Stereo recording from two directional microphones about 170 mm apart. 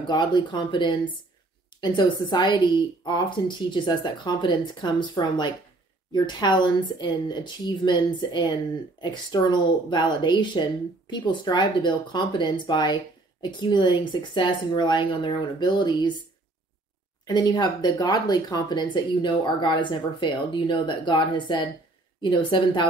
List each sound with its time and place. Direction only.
0.0 s speech: 25° left (ahead or behind)
17.3 s speech: 25° left (ahead or behind)